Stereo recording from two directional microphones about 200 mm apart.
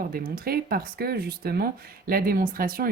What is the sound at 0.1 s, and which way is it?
Speech, 50° right (ahead or behind).